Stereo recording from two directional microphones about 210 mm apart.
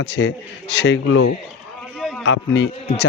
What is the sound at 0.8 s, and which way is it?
Speech, 65° left (ahead or behind).